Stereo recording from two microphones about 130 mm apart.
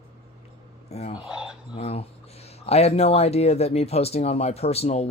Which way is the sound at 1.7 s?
50° left (ahead or behind).